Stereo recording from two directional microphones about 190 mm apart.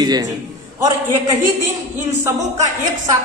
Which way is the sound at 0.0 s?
20° right (ahead or behind).